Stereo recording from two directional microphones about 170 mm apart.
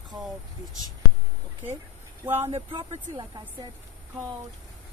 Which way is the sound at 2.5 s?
35° right (ahead or behind).